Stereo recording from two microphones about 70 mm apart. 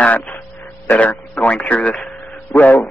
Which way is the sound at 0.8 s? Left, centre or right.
Left.